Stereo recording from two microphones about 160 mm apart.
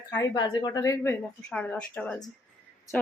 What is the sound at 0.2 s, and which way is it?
A woman's voice, 25° left (ahead or behind).